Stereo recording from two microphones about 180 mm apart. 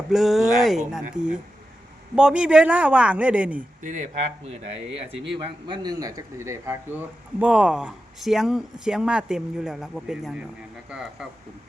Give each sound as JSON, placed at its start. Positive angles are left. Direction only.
{"t": 0.1, "sound": "a man's voice", "side_deg": 0}
{"t": 3.8, "sound": "speech", "side_deg": -45}
{"t": 5.1, "sound": "speech", "side_deg": -75}
{"t": 5.6, "sound": "speech", "side_deg": -25}